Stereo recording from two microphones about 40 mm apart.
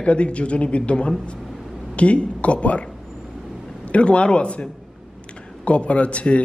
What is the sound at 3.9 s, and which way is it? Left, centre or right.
Speech, left.